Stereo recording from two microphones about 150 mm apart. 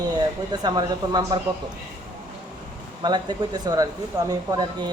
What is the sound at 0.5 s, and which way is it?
Speech, 25° right (ahead or behind).